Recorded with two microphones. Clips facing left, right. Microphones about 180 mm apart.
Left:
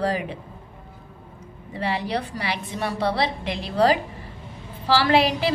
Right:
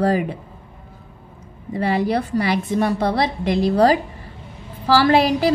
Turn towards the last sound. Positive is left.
turn(degrees=-40)  # may be behind; listen again after turning